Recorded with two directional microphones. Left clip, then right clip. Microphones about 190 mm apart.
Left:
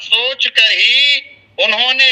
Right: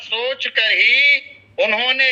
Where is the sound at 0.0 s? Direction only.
15° right (ahead or behind).